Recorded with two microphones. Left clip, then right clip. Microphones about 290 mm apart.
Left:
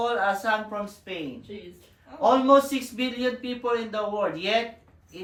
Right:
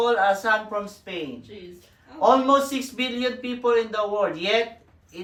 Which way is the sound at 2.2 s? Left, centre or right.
Right.